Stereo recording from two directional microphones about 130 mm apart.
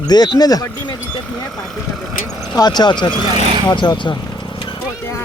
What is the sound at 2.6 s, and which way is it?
Speech, 35° left (ahead or behind).